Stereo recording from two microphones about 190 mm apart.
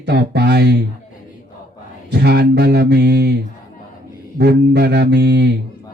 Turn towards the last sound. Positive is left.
turn(degrees=-60)  # may be behind; listen again after turning